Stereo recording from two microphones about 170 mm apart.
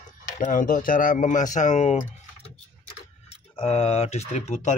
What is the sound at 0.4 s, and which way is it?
Speech, 50° left (ahead or behind).